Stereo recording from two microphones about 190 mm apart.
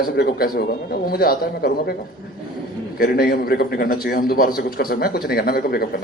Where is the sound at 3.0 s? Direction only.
55° left (ahead or behind).